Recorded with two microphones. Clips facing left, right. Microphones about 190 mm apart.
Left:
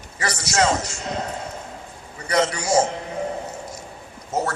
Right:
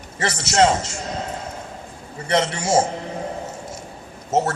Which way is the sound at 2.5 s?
25° right (ahead or behind).